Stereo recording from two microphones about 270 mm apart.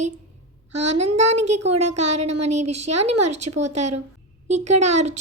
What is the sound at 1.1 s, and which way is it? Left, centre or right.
A woman's voice, right.